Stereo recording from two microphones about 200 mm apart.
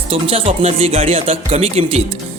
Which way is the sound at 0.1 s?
30° right (ahead or behind).